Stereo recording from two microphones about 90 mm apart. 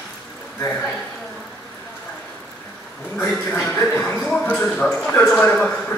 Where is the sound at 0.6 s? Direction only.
5° left (ahead or behind).